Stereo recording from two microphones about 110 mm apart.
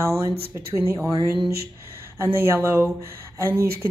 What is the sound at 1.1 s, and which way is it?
Speech, 40° right (ahead or behind).